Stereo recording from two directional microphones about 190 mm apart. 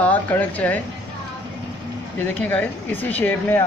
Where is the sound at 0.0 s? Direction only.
10° left (ahead or behind).